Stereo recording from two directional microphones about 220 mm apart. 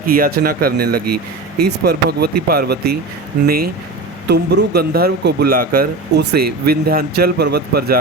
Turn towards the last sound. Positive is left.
turn(degrees=-45)  # may be behind; listen again after turning